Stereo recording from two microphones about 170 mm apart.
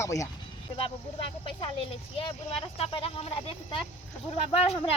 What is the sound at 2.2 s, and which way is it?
Speech, 35° left (ahead or behind).